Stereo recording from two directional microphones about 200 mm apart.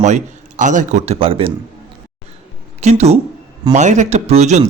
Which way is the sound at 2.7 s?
35° right (ahead or behind).